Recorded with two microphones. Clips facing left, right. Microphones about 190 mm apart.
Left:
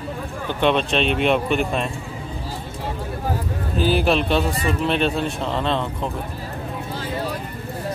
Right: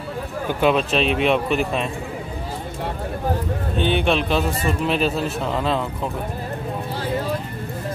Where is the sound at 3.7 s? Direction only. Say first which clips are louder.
Left 1 dB; 5° left (ahead or behind).